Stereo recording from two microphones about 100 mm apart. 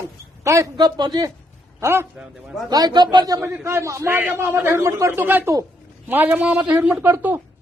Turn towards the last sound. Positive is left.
turn(degrees=-20)  # may be behind; listen again after turning